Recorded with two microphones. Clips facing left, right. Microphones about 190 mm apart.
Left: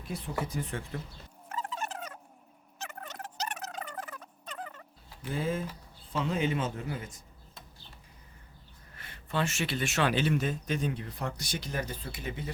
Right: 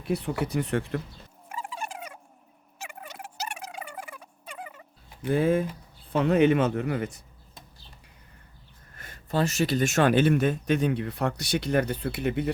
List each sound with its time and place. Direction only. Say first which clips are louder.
0.1 s speech: right 8 dB; 70° right (ahead or behind)
1.5 s a sound: even; 10° right (ahead or behind)
2.7 s turkey: right 1 dB; 10° right (ahead or behind)
5.2 s speech: right 9 dB; 60° right (ahead or behind)
9.0 s speech: right 5 dB; 45° right (ahead or behind); by 12.5 s 65° right (ahead or behind)